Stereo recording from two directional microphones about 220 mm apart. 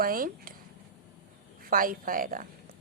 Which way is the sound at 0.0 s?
40° right (ahead or behind).